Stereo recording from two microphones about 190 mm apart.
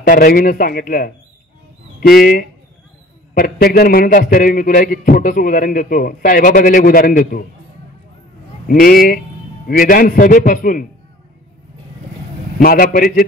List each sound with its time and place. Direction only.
0.0 s a man's voice: 50° left (ahead or behind)
3.3 s a man's voice: 50° left (ahead or behind)
8.6 s a man's voice: 50° left (ahead or behind)
12.6 s a man's voice: 50° left (ahead or behind)